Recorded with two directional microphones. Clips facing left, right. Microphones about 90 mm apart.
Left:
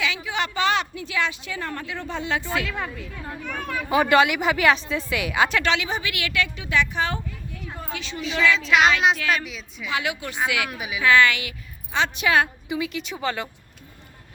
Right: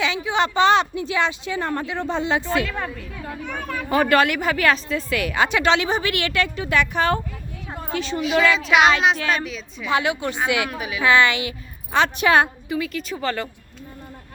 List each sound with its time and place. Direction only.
0.0 s a woman's voice: 30° right (ahead or behind)
2.6 s a woman's voice: centre (ahead or behind)
5.6 s a woman's voice: 35° right (ahead or behind); by 7.2 s 55° right (ahead or behind)
7.7 s a sound: 35° right (ahead or behind)
8.3 s a woman's voice: 55° right (ahead or behind)
8.5 s speech: 5° right (ahead or behind)
9.1 s speech: 35° right (ahead or behind)
9.4 s speech: 5° left (ahead or behind)
9.8 s speech: 35° right (ahead or behind)
10.7 s a woman's voice: 10° left (ahead or behind)
11.0 s a woman's voice: 20° right (ahead or behind)
11.9 s a woman's voice: 55° right (ahead or behind)
12.2 s speech: 40° right (ahead or behind)
12.6 s a woman's voice: 20° left (ahead or behind)